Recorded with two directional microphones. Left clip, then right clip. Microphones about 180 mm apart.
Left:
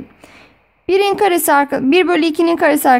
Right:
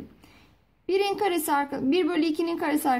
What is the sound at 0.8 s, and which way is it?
A woman's voice, 35° left (ahead or behind).